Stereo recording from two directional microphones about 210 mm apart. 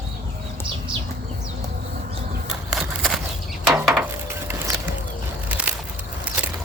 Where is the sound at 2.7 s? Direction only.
Centre (ahead or behind).